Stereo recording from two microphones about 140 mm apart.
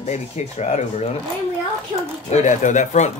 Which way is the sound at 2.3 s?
60° left (ahead or behind).